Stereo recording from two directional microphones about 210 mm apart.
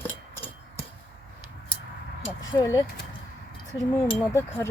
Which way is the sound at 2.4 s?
20° left (ahead or behind).